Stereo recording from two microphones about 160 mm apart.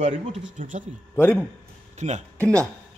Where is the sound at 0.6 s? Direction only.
55° right (ahead or behind).